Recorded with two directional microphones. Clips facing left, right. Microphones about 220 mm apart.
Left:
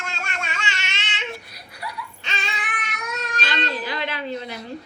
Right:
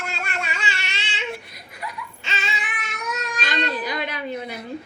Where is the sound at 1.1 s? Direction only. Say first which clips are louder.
Right 3 dB; 25° right (ahead or behind).